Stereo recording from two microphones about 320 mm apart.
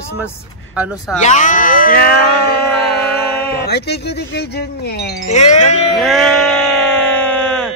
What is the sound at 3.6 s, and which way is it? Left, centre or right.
Speech, left.